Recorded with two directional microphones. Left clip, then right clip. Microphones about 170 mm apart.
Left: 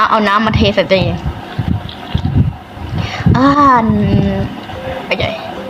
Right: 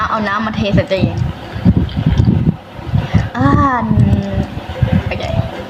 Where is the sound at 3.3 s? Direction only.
30° left (ahead or behind).